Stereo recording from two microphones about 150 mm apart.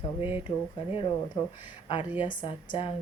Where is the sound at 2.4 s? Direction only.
35° left (ahead or behind).